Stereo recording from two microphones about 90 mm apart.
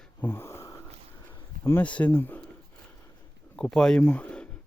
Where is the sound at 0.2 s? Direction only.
25° left (ahead or behind).